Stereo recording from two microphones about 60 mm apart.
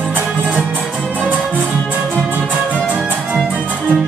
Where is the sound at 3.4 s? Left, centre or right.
Right.